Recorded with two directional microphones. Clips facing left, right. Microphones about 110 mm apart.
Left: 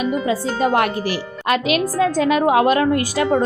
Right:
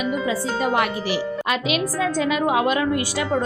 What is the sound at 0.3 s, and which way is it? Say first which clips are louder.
A woman's voice: left 4 dB; 50° left (ahead or behind).